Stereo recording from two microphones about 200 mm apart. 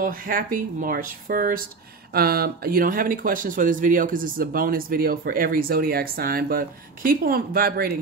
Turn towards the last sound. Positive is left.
turn(degrees=-50)  # may be behind; listen again after turning